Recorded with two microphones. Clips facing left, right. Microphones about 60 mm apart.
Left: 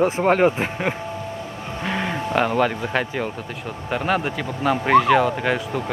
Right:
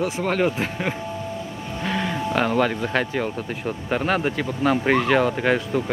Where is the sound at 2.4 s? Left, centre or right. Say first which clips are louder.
Even; centre.